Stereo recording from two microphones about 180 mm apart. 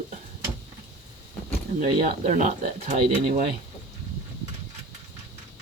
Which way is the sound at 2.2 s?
40° right (ahead or behind).